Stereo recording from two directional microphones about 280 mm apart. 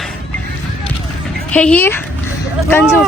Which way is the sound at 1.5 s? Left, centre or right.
Centre.